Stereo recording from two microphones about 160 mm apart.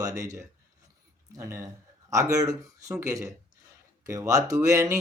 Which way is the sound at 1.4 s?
20° right (ahead or behind).